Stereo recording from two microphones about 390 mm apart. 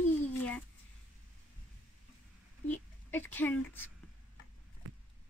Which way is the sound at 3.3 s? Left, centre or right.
Centre.